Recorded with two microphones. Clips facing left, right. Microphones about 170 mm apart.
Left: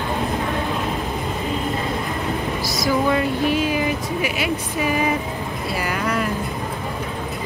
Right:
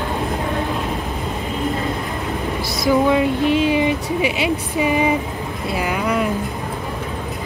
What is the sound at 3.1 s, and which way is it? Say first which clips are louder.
Speech: right 3 dB; 20° right (ahead or behind).